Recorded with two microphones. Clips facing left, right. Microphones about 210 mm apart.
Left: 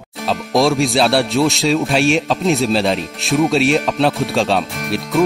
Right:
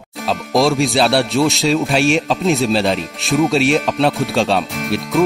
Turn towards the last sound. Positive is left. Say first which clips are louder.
# right 1 dB
turn(degrees=0)  # may be behind; listen again after turning